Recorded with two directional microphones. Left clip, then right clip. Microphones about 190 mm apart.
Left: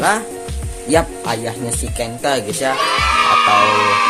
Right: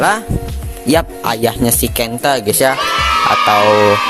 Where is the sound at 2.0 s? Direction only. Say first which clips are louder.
Right 2 dB; 55° right (ahead or behind).